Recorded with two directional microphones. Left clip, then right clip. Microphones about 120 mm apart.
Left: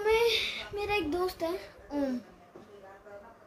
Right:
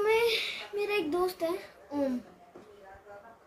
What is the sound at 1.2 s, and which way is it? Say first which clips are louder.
Speech: right 1 dB; 5° left (ahead or behind).